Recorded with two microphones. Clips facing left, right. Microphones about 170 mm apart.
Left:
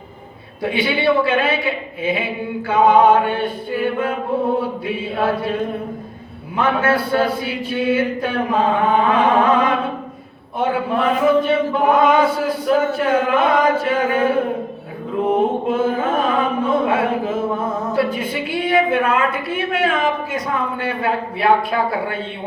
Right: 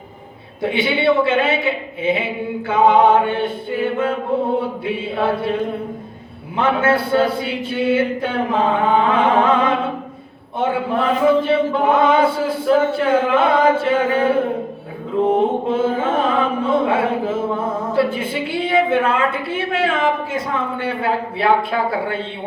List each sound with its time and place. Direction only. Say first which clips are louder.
0.6 s chant: right 1 dB; 25° right (ahead or behind)
6.6 s chant: right 1 dB; 25° right (ahead or behind)